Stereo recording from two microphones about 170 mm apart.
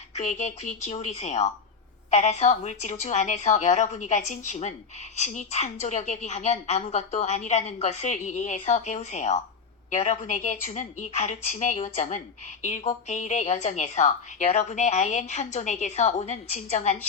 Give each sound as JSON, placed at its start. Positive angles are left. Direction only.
{"t": 0.1, "sound": "a woman's voice", "side_deg": 45}